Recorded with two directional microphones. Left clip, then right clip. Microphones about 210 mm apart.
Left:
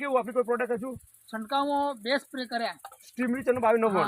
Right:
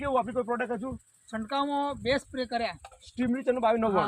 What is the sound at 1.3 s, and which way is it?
Speech, 20° right (ahead or behind).